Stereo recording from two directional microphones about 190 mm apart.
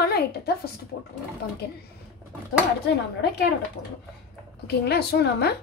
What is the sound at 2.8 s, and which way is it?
Speech, 60° left (ahead or behind).